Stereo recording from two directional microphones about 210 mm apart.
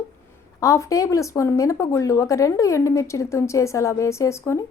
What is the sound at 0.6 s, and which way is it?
Speech, 15° left (ahead or behind).